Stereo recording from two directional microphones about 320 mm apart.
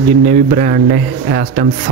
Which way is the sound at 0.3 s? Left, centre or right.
Right.